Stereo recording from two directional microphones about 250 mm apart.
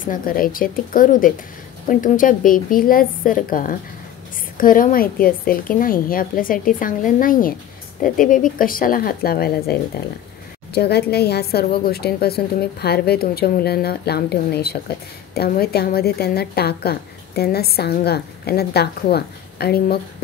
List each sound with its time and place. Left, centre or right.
0.0 s a woman's voice: left